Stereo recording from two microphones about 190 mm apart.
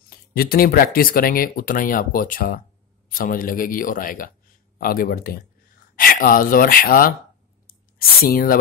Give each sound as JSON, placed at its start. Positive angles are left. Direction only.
{"t": 0.3, "sound": "speech", "side_deg": 50}
{"t": 8.2, "sound": "speech", "side_deg": 50}